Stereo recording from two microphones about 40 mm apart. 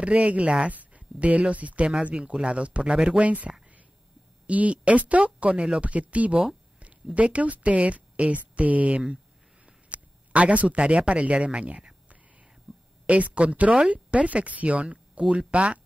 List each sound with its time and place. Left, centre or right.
0.0 s speech: right
2.0 s speech: right
3.2 s speech: right
12.7 s whispering: centre
13.0 s speech: right